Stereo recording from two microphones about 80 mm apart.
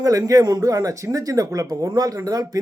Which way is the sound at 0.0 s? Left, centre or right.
Right.